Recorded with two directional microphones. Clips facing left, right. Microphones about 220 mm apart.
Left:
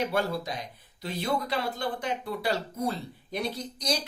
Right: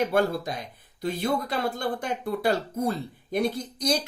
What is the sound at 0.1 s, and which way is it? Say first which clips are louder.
Speech: right 5 dB; 50° right (ahead or behind).